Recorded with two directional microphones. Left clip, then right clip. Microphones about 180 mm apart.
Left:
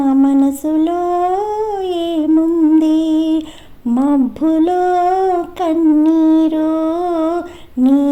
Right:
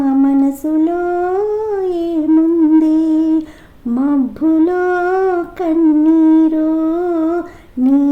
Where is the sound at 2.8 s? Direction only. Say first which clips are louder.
Right 1 dB; 35° left (ahead or behind).